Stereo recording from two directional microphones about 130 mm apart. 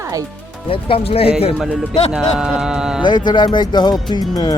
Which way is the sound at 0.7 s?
45° left (ahead or behind).